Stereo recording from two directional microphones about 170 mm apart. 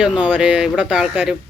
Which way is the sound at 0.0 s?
5° right (ahead or behind).